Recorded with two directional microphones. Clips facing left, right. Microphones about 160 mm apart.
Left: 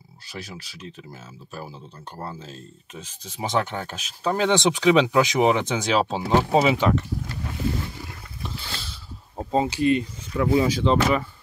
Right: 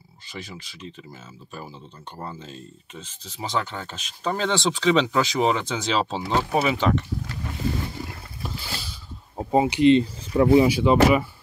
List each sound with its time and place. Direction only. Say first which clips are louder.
0.3 s speech: even; 5° left (ahead or behind)
2.1 s speech: even; 5° left (ahead or behind)
3.3 s speech: left 3 dB; 15° left (ahead or behind)
8.4 s a sound: right 1 dB; 5° right (ahead or behind)
9.4 s speech: right 3 dB; 15° right (ahead or behind)
10.6 s speech: right 3 dB; 10° right (ahead or behind)